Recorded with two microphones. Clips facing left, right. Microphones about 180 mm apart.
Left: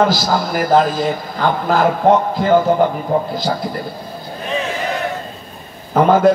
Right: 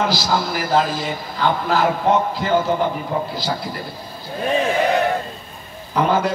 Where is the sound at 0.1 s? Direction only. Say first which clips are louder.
Left 3 dB; 50° left (ahead or behind).